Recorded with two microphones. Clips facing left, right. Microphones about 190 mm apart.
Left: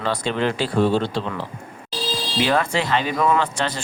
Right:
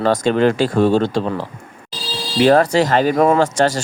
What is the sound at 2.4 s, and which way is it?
Speech, 40° right (ahead or behind).